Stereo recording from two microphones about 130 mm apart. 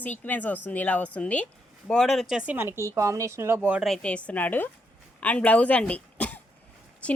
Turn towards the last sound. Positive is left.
turn(degrees=10)  # may be behind; listen again after turning